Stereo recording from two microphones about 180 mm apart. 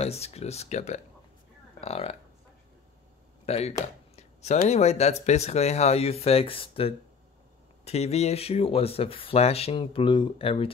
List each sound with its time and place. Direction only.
0.0 s speech: 35° left (ahead or behind)
3.4 s speech: 35° left (ahead or behind)
4.2 s a sound: 40° left (ahead or behind)
4.6 s speech: 35° left (ahead or behind)